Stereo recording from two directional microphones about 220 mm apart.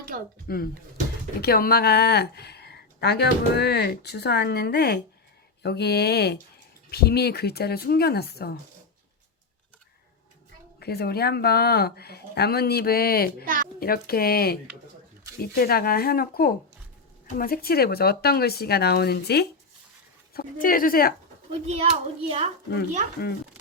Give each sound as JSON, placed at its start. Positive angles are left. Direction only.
{"t": 0.4, "sound": "speech", "side_deg": 45}
{"t": 10.8, "sound": "speech", "side_deg": 45}
{"t": 13.4, "sound": "a woman's voice", "side_deg": -40}
{"t": 13.7, "sound": "speech", "side_deg": 45}
{"t": 21.7, "sound": "a child's voice", "side_deg": -30}
{"t": 23.2, "sound": "speech", "side_deg": 45}